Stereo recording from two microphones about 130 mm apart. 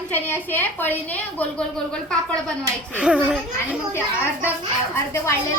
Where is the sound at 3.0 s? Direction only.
5° right (ahead or behind).